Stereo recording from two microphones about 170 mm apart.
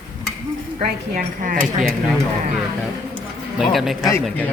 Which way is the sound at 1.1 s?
55° right (ahead or behind).